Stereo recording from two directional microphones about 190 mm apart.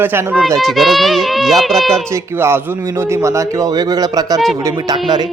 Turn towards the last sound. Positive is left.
turn(degrees=-20)  # may be behind; listen again after turning